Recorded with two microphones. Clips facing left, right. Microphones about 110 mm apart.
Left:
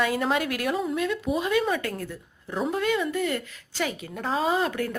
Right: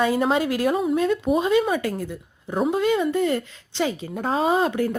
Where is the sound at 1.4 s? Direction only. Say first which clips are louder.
Right 4 dB; 25° right (ahead or behind).